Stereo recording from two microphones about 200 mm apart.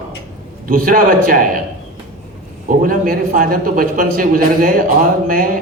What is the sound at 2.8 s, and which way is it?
A man's voice, 45° right (ahead or behind).